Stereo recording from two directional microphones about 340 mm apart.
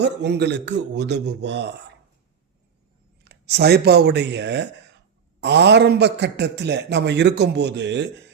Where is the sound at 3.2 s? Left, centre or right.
Right.